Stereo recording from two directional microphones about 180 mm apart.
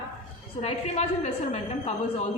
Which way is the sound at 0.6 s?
35° left (ahead or behind).